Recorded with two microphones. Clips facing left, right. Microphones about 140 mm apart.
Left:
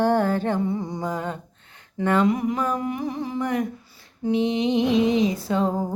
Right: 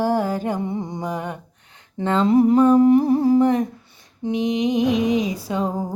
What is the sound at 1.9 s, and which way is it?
Humming, 25° right (ahead or behind).